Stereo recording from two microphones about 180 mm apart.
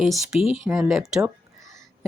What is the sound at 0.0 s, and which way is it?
Speech, centre (ahead or behind).